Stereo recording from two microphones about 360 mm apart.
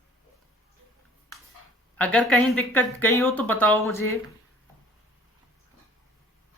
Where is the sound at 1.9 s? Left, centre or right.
Centre.